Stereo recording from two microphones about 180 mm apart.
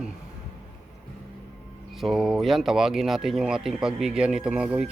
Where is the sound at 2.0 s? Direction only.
Centre (ahead or behind).